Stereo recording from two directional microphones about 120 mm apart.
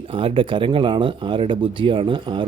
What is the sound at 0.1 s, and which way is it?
Speech, 50° right (ahead or behind).